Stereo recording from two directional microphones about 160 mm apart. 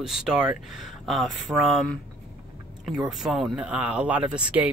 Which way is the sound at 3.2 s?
5° right (ahead or behind).